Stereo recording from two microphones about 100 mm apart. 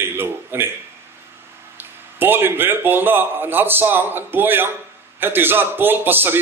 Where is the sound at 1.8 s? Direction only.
20° right (ahead or behind).